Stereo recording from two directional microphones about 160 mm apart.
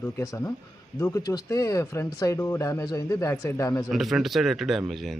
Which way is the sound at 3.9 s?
Centre (ahead or behind).